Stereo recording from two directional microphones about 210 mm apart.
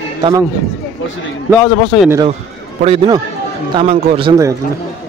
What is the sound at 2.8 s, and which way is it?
Speech, 25° right (ahead or behind).